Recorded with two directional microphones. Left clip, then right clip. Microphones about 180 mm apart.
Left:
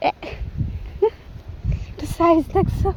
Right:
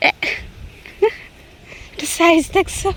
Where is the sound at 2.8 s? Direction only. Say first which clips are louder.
Right 4 dB; 15° right (ahead or behind).